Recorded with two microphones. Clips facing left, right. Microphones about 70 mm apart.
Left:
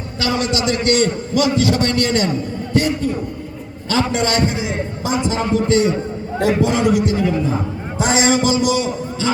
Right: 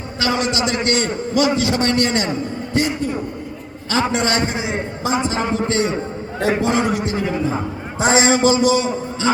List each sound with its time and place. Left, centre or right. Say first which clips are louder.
0.2 s a man's voice: even; right